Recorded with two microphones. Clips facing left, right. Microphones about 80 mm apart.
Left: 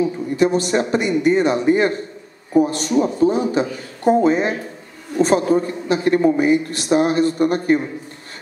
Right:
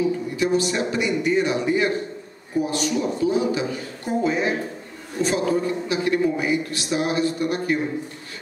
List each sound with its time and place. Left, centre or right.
0.4 s speech: left